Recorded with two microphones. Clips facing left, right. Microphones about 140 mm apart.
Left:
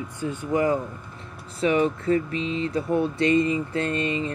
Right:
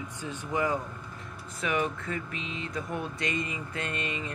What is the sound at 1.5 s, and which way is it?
Speech, 30° left (ahead or behind).